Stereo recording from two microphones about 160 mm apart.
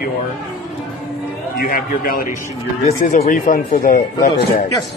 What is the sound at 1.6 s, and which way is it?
Speech, 65° left (ahead or behind).